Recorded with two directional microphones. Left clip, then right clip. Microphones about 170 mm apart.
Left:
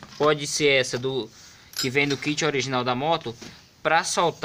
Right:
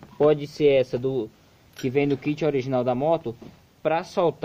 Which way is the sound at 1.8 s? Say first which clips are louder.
Even; 40° right (ahead or behind).